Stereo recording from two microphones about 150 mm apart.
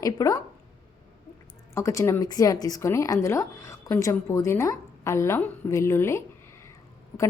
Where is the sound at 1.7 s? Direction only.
20° left (ahead or behind).